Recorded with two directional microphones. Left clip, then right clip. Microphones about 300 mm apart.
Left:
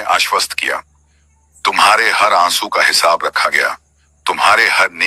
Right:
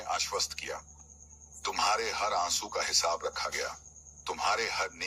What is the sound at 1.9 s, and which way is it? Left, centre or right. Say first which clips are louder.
Speech: left 19 dB; left.